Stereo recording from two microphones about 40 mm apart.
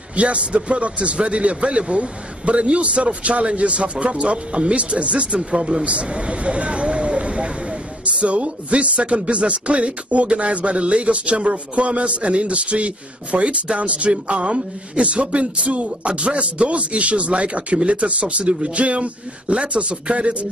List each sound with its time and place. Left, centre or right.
0.1 s speech: right
5.4 s speech: centre